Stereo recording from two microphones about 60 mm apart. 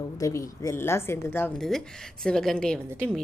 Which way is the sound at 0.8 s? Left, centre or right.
Left.